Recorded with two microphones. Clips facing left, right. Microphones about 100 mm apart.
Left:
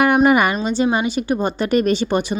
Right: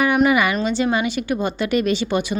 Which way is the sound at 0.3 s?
45° left (ahead or behind).